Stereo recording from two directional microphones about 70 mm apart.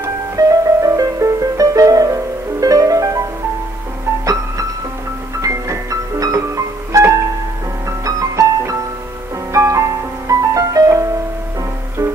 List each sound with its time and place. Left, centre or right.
0.4 s music: right
5.4 s music: right